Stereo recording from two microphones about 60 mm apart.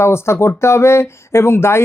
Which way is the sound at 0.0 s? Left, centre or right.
Left.